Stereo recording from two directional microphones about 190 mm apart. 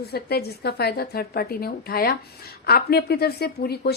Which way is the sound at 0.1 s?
55° left (ahead or behind).